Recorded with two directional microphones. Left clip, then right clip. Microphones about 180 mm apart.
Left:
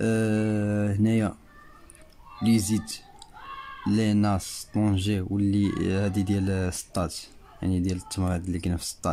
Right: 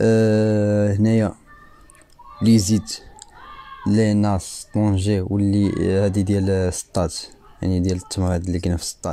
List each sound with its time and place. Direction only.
0.0 s mantra: 30° right (ahead or behind)
2.4 s speech: 30° right (ahead or behind)